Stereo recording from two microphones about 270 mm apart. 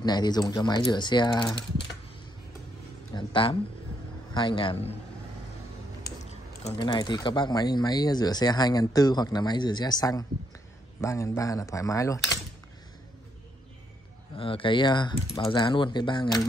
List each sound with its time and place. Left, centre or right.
0.0 s speech: centre
3.2 s a man's voice: centre
6.6 s speech: centre
14.3 s speech: centre